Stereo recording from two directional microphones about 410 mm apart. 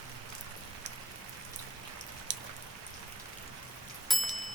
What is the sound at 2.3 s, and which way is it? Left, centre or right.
Raindrop, right.